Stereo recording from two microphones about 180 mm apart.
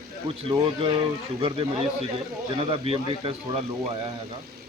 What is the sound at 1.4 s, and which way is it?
A man's voice, 30° right (ahead or behind).